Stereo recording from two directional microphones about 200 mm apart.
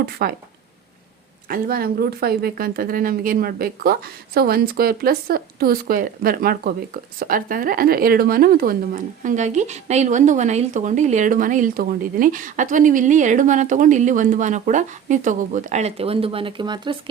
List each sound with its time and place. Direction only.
0.0 s speech: 50° right (ahead or behind)
1.5 s speech: 45° right (ahead or behind); by 17.0 s 20° right (ahead or behind)